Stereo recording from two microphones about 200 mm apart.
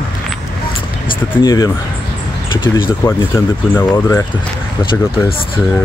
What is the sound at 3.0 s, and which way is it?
Speech, 10° left (ahead or behind).